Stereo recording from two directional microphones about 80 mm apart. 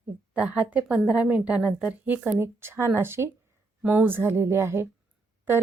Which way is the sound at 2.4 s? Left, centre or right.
Right.